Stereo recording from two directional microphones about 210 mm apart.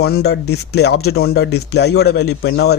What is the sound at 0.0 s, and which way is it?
Speech, 50° left (ahead or behind).